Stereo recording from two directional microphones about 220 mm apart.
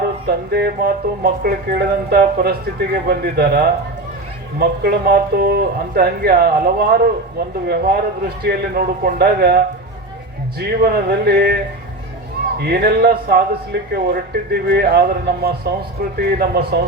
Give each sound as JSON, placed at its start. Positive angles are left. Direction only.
{"t": 0.3, "sound": "speech", "side_deg": -45}